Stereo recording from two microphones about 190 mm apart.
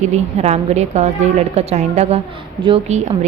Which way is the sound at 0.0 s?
35° right (ahead or behind).